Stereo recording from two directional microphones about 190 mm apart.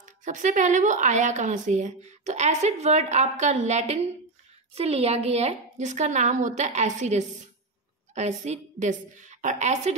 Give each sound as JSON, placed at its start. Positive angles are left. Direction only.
{"t": 0.0, "sound": "speech", "side_deg": -40}